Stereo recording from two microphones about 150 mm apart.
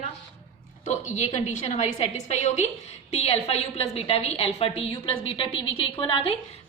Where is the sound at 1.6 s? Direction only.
50° left (ahead or behind).